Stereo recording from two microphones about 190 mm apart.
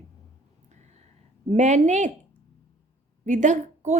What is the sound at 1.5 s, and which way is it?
Speech, 40° right (ahead or behind).